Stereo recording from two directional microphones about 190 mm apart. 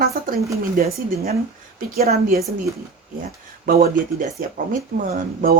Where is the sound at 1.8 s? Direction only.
50° right (ahead or behind).